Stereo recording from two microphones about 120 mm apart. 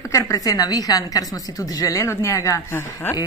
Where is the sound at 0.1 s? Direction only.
30° left (ahead or behind).